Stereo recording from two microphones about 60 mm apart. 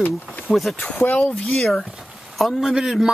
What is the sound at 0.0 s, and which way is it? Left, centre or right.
Speech, left.